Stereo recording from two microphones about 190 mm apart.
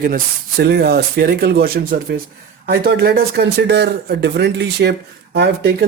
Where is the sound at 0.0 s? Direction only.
55° right (ahead or behind).